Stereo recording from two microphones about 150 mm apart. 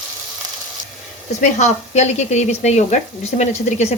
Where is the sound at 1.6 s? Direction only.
50° left (ahead or behind).